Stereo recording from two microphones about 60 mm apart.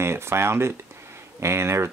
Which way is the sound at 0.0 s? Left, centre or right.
Right.